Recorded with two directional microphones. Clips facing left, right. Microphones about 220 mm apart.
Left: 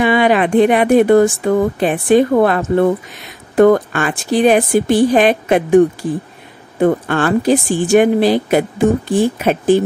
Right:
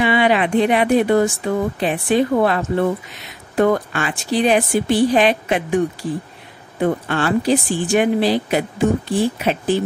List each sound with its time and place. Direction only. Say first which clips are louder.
0.0 s speech: left 4 dB; 45° left (ahead or behind)
6.8 s speech: left 5 dB; 50° left (ahead or behind)